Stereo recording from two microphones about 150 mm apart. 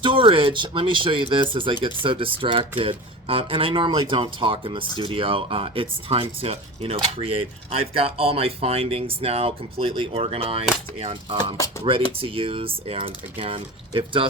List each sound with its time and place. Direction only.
0.0 s speech: 35° right (ahead or behind)